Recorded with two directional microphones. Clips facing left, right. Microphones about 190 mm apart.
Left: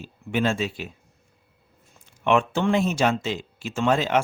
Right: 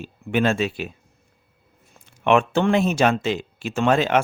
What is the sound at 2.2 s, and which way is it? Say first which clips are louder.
Speech: right 3 dB; 65° right (ahead or behind).